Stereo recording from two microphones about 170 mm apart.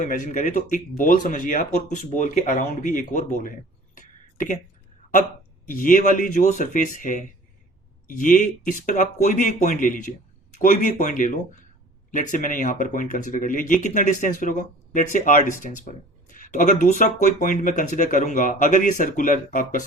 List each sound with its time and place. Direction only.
0.0 s speech: 45° left (ahead or behind)
3.9 s a sound: 50° left (ahead or behind)
5.6 s speech: 55° left (ahead or behind)